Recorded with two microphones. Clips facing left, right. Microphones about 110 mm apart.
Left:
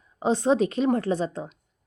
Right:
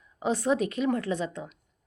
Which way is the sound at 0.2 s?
25° left (ahead or behind).